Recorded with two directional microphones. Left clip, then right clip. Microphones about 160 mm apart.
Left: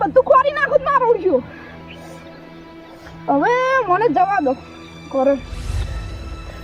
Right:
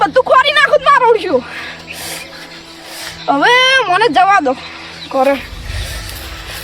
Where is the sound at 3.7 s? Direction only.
25° right (ahead or behind).